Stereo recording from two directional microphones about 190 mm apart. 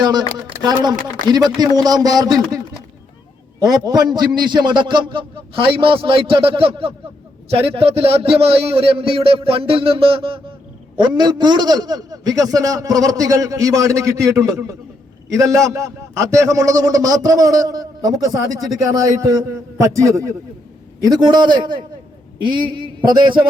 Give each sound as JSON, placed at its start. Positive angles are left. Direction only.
{"t": 0.0, "sound": "speech", "side_deg": -20}
{"t": 1.3, "sound": "a man's voice", "side_deg": -20}
{"t": 3.6, "sound": "a man's voice", "side_deg": -20}